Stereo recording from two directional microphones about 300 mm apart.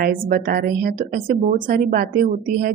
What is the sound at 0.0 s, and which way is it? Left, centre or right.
A woman's voice, right.